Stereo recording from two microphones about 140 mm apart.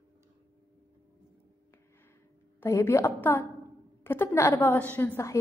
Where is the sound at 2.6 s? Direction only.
20° left (ahead or behind).